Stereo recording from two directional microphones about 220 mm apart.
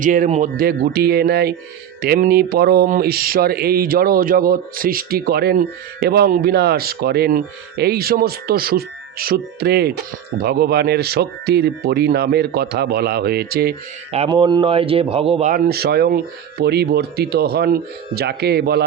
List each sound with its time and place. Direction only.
0.0 s speech: 35° right (ahead or behind)
14.1 s speech: 25° right (ahead or behind); by 18.9 s 45° right (ahead or behind)